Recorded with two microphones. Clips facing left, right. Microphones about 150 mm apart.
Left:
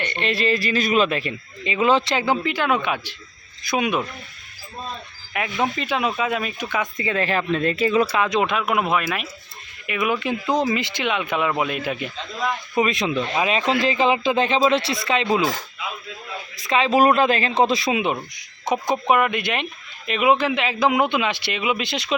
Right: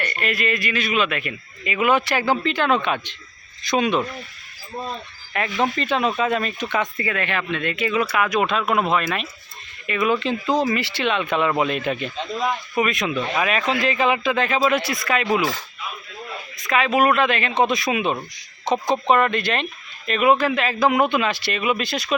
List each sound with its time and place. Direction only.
0.0 s speech: 25° left (ahead or behind)
5.3 s speech: 10° left (ahead or behind)
7.0 s speech: 30° left (ahead or behind); by 12.1 s 10° left (ahead or behind)
12.7 s speech: 25° left (ahead or behind)
16.6 s speech: 30° left (ahead or behind)